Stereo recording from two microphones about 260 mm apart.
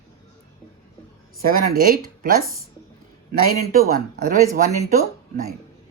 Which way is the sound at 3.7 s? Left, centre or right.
Right.